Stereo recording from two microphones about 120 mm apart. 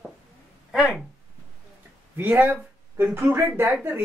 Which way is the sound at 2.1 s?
15° right (ahead or behind).